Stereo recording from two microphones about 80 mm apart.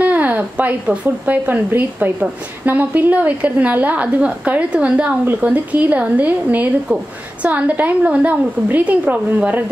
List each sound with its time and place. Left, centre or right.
0.0 s a woman's voice: right